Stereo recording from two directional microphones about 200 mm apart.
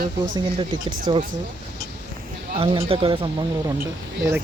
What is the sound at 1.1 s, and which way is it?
Speech, 25° right (ahead or behind).